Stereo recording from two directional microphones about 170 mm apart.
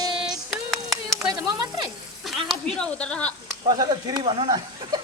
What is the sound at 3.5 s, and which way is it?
Speech, 20° right (ahead or behind).